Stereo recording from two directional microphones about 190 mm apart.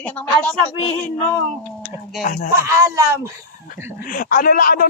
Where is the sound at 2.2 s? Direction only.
50° left (ahead or behind).